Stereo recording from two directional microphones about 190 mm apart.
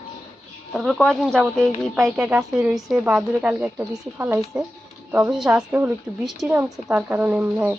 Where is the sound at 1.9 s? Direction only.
10° right (ahead or behind).